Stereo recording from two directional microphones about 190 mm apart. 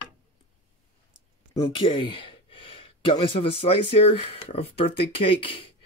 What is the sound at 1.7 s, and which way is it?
Speech, 25° left (ahead or behind).